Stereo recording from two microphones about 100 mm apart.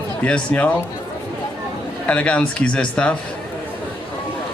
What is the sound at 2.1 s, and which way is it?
Speech, 10° left (ahead or behind).